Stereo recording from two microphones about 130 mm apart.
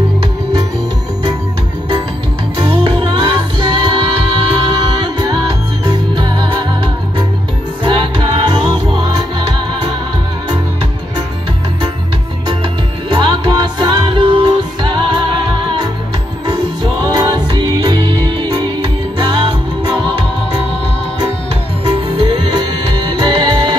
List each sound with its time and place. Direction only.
2.5 s music: 45° right (ahead or behind)
13.1 s music: 35° right (ahead or behind)
16.4 s music: 35° right (ahead or behind)
21.8 s music: 45° right (ahead or behind)